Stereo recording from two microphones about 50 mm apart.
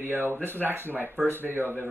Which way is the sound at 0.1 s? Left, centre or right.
Right.